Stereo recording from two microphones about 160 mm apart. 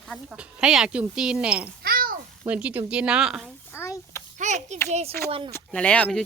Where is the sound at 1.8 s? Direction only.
65° right (ahead or behind).